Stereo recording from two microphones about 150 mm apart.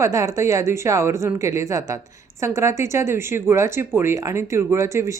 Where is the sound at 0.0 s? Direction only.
20° right (ahead or behind).